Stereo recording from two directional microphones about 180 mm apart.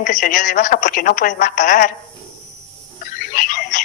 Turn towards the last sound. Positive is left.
turn(degrees=50)  # may be behind; listen again after turning